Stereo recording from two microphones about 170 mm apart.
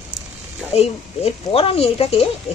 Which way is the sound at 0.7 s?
35° left (ahead or behind).